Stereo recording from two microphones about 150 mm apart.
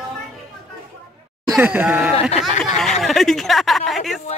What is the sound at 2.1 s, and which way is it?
Speech, 45° left (ahead or behind).